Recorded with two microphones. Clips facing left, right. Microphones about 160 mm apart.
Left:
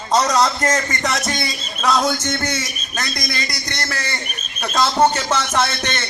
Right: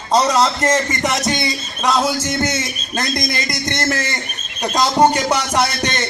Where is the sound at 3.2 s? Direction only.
45° right (ahead or behind).